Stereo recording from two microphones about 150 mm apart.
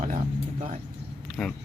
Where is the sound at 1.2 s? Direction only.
Centre (ahead or behind).